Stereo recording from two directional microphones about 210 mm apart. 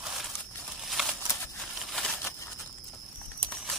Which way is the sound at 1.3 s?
10° left (ahead or behind).